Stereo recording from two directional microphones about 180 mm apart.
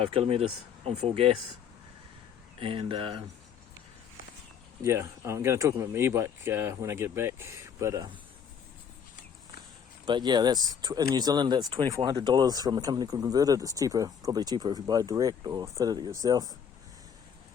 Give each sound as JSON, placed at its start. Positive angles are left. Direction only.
{"t": 0.1, "sound": "speech", "side_deg": -35}
{"t": 2.6, "sound": "speech", "side_deg": -30}
{"t": 4.8, "sound": "speech", "side_deg": -15}
{"t": 10.1, "sound": "speech", "side_deg": -25}